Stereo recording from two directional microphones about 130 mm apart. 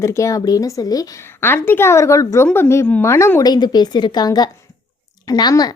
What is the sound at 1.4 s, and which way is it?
Speech, 15° left (ahead or behind).